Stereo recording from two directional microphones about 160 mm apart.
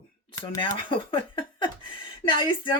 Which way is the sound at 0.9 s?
30° left (ahead or behind).